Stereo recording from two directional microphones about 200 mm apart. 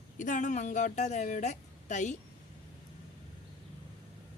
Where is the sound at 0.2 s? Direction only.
40° left (ahead or behind).